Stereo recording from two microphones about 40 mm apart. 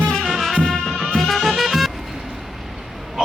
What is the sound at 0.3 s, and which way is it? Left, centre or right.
Music, centre.